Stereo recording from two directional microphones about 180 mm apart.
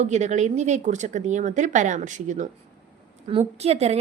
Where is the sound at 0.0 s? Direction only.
40° right (ahead or behind).